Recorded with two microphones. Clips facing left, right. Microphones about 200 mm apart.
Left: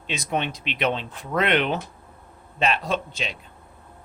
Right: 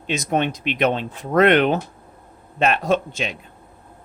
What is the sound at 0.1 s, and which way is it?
Speech, 45° right (ahead or behind).